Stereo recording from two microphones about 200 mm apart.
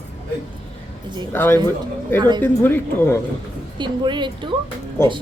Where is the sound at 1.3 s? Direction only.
10° left (ahead or behind).